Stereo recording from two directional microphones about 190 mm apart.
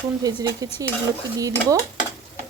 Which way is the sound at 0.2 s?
20° right (ahead or behind).